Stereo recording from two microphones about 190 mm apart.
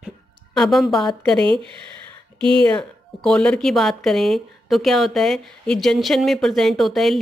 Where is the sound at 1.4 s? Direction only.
25° right (ahead or behind).